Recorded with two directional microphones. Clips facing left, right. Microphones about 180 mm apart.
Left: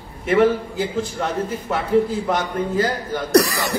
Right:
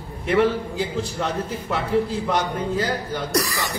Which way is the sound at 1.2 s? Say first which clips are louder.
Left 2 dB; 50° left (ahead or behind).